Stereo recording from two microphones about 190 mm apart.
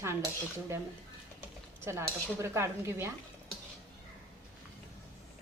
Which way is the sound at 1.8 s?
15° right (ahead or behind).